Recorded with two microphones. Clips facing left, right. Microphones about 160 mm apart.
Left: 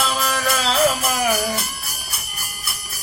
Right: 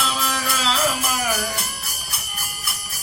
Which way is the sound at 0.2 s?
50° left (ahead or behind).